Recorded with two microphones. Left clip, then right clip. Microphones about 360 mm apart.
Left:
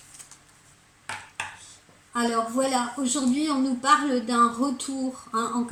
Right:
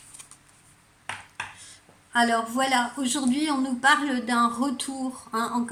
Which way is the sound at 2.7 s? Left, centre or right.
Right.